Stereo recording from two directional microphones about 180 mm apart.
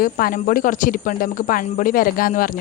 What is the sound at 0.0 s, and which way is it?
A woman's voice, 55° left (ahead or behind).